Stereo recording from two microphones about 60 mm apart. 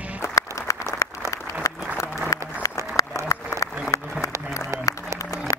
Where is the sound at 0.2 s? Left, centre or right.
Left.